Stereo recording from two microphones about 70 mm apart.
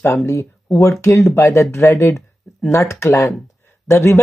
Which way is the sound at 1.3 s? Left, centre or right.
Left.